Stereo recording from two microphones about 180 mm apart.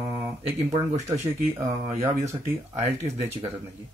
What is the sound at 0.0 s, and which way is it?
Speech, 15° right (ahead or behind).